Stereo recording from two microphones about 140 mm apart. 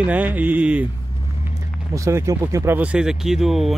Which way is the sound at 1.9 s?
20° right (ahead or behind).